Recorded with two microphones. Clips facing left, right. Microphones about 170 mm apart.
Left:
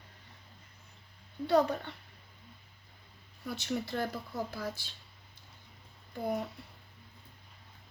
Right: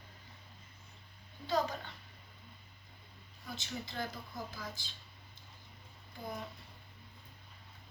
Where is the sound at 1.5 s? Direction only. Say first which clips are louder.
Left 7 dB; 65° left (ahead or behind).